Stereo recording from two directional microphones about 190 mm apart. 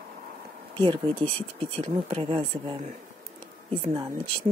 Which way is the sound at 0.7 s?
25° right (ahead or behind).